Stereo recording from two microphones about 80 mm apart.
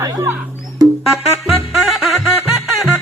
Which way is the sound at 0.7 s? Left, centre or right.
Centre.